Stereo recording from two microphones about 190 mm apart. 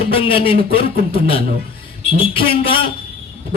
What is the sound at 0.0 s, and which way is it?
Speech, 30° left (ahead or behind).